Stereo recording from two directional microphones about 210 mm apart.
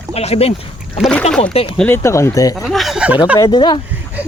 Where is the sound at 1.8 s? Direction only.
10° left (ahead or behind).